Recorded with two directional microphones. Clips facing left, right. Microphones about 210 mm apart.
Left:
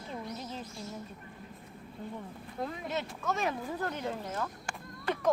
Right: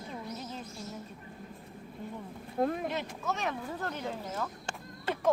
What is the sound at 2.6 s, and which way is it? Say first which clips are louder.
Speech: right 8 dB; 50° right (ahead or behind).